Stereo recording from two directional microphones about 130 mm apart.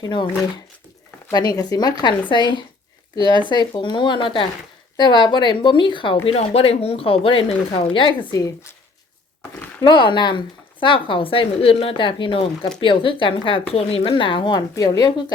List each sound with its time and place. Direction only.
0.0 s a woman's voice: 35° left (ahead or behind)
1.3 s a woman's voice: 30° left (ahead or behind)
6.2 s speech: 50° left (ahead or behind)
8.3 s speech: 30° left (ahead or behind)
9.8 s a woman's voice: 40° left (ahead or behind)